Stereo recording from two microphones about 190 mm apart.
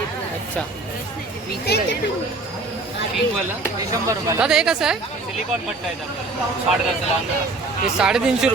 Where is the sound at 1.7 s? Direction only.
60° left (ahead or behind).